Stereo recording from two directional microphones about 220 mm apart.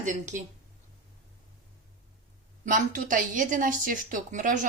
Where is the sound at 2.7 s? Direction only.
35° right (ahead or behind).